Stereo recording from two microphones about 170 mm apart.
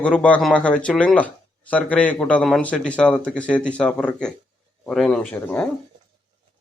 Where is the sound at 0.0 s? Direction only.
5° left (ahead or behind).